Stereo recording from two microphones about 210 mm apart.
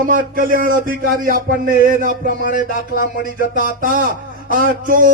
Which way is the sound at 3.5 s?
40° right (ahead or behind).